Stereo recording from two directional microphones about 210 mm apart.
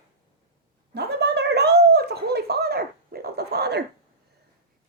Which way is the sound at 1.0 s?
50° right (ahead or behind).